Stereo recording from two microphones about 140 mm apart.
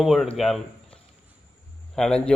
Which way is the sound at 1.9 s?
5° left (ahead or behind).